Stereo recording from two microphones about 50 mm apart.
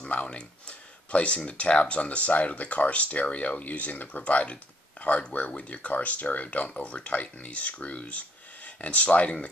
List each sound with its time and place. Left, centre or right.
0.1 s speech: left